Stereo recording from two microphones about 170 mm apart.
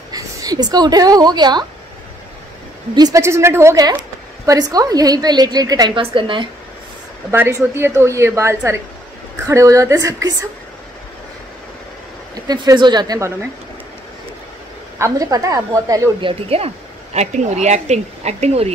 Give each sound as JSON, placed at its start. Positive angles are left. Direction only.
{"t": 0.1, "sound": "a woman's voice", "side_deg": -20}
{"t": 2.9, "sound": "a woman's voice", "side_deg": -20}
{"t": 7.2, "sound": "a woman's voice", "side_deg": -15}
{"t": 12.4, "sound": "a woman's voice", "side_deg": -25}
{"t": 15.0, "sound": "a woman's voice", "side_deg": -15}